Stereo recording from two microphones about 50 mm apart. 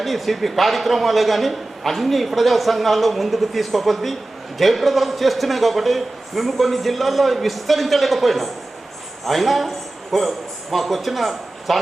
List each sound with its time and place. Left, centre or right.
0.0 s a man's voice: centre